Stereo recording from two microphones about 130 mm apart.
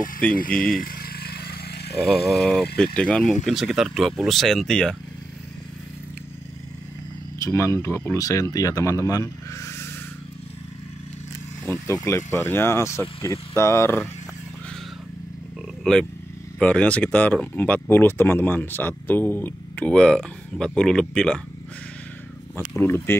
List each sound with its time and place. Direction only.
0.2 s speech: 10° left (ahead or behind)
2.0 s speech: centre (ahead or behind)
7.3 s speech: 25° left (ahead or behind)
11.9 s speech: 25° left (ahead or behind)
15.8 s speech: 5° left (ahead or behind)
22.8 s speech: 15° left (ahead or behind)